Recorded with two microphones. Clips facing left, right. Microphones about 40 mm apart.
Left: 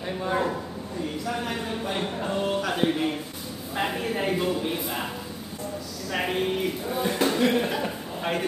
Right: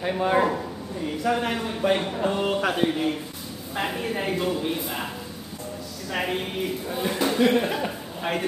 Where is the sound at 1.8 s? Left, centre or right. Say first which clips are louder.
Right 11 dB; right.